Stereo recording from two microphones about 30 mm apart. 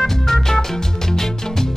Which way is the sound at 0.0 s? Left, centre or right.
Centre.